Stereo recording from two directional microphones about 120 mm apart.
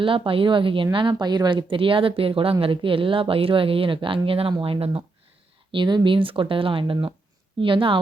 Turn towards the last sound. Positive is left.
turn(degrees=-45)  # may be behind; listen again after turning